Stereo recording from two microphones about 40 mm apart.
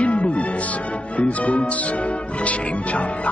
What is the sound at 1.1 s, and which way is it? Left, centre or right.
Speech, left.